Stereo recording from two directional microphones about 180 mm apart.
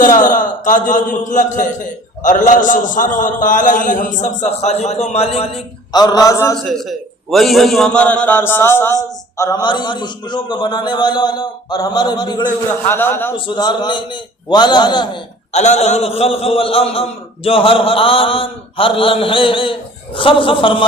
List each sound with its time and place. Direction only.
0.0 s a man's voice: 50° left (ahead or behind)
5.9 s a man's voice: 20° left (ahead or behind)
6.7 s a man's voice: centre (ahead or behind); by 12.5 s 25° left (ahead or behind)
12.9 s a man's voice: 10° left (ahead or behind)
13.3 s a man's voice: 25° left (ahead or behind)
15.5 s a man's voice: 40° left (ahead or behind)